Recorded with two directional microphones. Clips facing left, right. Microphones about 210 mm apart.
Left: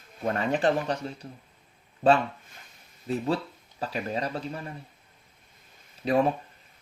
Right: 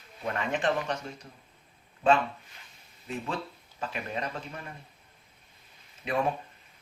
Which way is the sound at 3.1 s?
35° left (ahead or behind).